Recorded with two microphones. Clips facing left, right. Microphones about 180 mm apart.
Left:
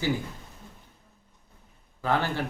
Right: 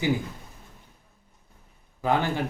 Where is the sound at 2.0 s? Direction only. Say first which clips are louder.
Right 2 dB; 15° right (ahead or behind).